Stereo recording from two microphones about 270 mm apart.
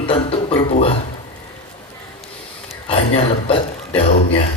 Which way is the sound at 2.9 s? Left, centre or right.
Left.